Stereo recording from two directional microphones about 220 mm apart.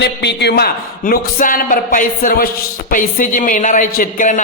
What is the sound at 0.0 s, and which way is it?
A man's voice, 50° left (ahead or behind).